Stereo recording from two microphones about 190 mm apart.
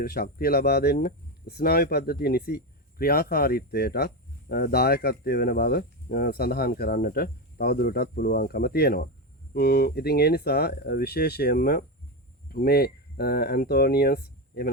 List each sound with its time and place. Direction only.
0.0 s speech: 55° left (ahead or behind)